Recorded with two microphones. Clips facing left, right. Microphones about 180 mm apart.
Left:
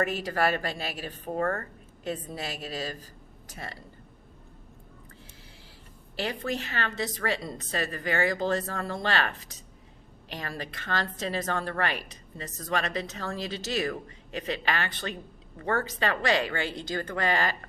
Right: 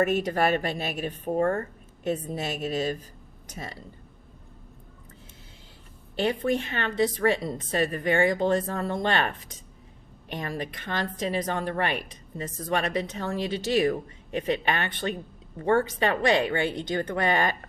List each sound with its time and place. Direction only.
0.0 s speech: 20° right (ahead or behind)
6.1 s a woman's voice: 20° right (ahead or behind)